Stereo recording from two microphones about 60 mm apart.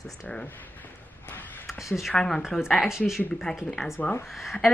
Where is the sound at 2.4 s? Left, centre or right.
Centre.